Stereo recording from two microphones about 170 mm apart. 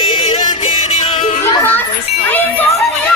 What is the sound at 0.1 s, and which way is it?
Music, 30° left (ahead or behind).